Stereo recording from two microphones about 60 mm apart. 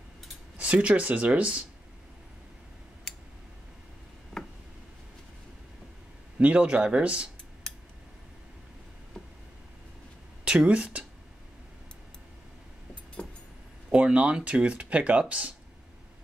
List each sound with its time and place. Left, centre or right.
0.6 s speech: right
6.4 s speech: right
10.4 s speech: centre
13.2 s vehicle: centre
13.8 s speech: centre